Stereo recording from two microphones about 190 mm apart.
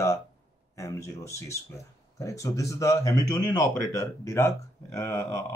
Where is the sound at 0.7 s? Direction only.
15° left (ahead or behind).